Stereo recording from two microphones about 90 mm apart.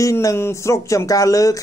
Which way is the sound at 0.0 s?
35° left (ahead or behind).